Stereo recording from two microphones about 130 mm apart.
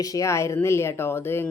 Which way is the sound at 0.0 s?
25° left (ahead or behind).